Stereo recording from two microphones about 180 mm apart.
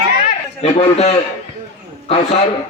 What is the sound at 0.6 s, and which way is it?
Speech, 35° left (ahead or behind).